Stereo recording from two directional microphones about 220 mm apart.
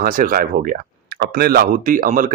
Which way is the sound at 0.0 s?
40° right (ahead or behind).